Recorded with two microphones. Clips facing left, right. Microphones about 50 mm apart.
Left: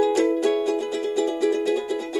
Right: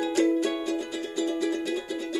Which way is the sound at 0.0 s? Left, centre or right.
Centre.